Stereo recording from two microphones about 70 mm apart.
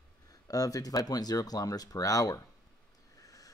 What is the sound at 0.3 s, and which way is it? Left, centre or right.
Speech, left.